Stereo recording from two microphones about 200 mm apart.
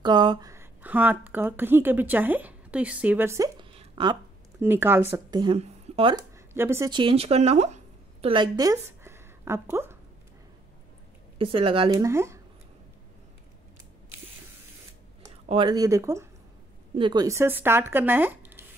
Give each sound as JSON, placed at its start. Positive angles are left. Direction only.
{"t": 0.0, "sound": "a woman's voice", "side_deg": -20}
{"t": 3.7, "sound": "hiccup", "side_deg": -25}
{"t": 4.6, "sound": "speech", "side_deg": -10}
{"t": 5.6, "sound": "a sound", "side_deg": -25}
{"t": 6.3, "sound": "a sound", "side_deg": -10}
{"t": 6.9, "sound": "a woman's voice", "side_deg": -25}
{"t": 11.3, "sound": "speech", "side_deg": -25}
{"t": 15.4, "sound": "speech", "side_deg": -25}